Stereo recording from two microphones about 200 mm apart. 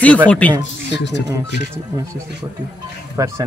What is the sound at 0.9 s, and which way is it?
Speech, 60° left (ahead or behind).